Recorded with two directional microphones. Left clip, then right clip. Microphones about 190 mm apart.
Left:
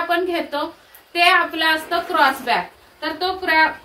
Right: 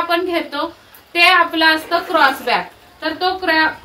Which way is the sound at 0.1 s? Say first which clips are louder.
Right 2 dB; 15° right (ahead or behind).